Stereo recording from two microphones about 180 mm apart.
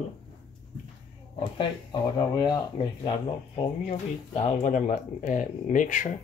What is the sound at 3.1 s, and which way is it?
Speech, 35° left (ahead or behind).